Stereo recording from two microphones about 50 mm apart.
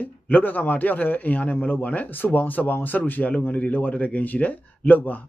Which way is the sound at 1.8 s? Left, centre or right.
Left.